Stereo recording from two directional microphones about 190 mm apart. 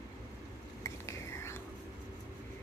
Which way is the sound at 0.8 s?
15° left (ahead or behind).